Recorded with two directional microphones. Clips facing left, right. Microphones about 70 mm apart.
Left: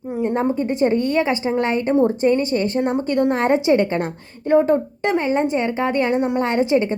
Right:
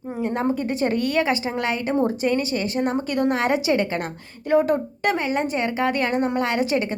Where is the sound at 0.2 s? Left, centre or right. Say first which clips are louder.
Left 4 dB; centre.